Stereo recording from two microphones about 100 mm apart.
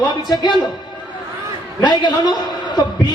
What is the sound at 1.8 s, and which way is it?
A man's voice, 45° left (ahead or behind).